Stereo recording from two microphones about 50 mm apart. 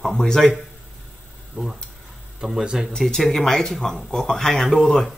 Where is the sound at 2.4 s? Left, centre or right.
Centre.